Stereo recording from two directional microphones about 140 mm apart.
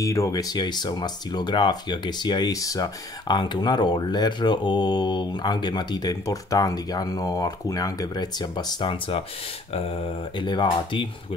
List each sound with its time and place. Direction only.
0.0 s speech: 20° left (ahead or behind)